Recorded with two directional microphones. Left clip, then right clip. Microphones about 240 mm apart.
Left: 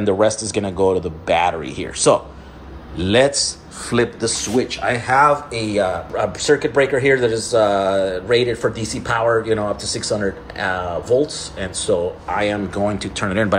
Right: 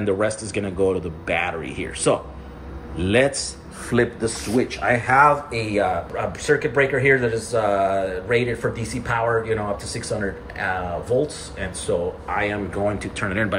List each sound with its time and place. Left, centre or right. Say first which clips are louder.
0.0 s speech: left 5 dB; centre